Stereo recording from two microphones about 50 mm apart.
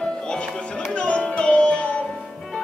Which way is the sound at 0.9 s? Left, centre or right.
Left.